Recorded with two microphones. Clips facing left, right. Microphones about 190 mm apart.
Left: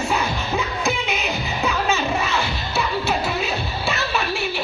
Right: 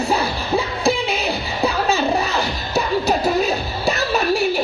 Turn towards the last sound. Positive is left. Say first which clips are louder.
# right 6 dB
turn(degrees=-40)  # may be behind; listen again after turning